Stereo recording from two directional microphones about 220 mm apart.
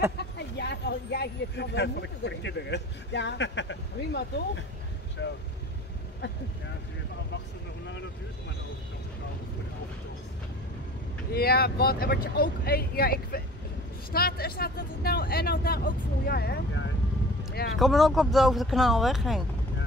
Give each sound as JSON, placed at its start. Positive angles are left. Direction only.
{"t": 0.2, "sound": "speech", "side_deg": 50}
{"t": 11.3, "sound": "speech", "side_deg": 45}
{"t": 17.7, "sound": "speech", "side_deg": 0}